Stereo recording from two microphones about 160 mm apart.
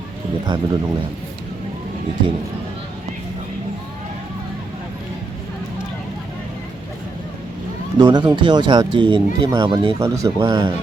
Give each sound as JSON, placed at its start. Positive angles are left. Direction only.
{"t": 0.4, "sound": "speech", "side_deg": -30}
{"t": 7.9, "sound": "speech", "side_deg": -25}